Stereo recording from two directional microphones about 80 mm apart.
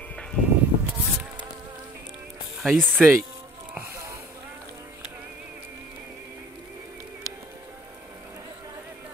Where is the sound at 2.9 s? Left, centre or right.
Right.